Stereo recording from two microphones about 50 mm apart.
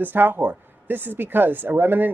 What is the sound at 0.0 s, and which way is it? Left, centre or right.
Speech, right.